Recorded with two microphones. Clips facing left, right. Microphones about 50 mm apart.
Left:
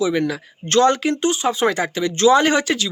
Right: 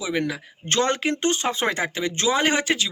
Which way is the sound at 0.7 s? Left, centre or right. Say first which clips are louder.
Left 7 dB; right.